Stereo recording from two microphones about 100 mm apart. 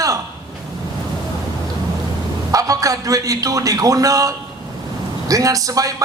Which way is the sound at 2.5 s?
35° right (ahead or behind).